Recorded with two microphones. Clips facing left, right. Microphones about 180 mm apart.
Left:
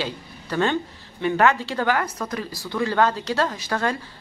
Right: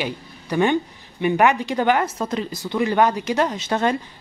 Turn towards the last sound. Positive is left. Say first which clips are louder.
# right 4 dB
turn(degrees=-20)  # may be behind; listen again after turning